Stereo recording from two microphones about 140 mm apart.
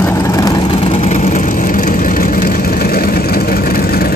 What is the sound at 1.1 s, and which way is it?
Vehicle, 65° left (ahead or behind).